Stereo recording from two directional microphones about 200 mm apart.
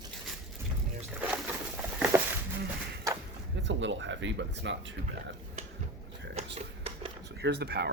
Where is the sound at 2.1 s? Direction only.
15° right (ahead or behind).